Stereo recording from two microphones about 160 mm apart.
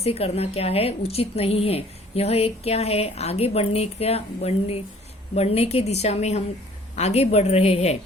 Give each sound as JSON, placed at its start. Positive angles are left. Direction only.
{"t": 0.0, "sound": "a woman's voice", "side_deg": 40}